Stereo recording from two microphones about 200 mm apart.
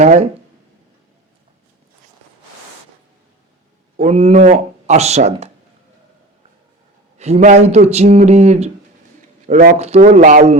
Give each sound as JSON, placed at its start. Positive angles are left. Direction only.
{"t": 0.0, "sound": "speech", "side_deg": -35}
{"t": 3.9, "sound": "speech", "side_deg": -30}
{"t": 7.2, "sound": "speech", "side_deg": -35}